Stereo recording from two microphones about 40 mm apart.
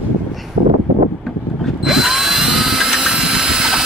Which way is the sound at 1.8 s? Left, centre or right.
Centre.